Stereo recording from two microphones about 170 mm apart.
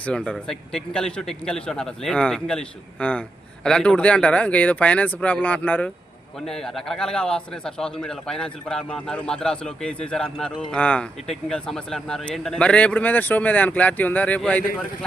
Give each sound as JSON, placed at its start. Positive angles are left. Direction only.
{"t": 0.0, "sound": "a man's voice", "side_deg": 5}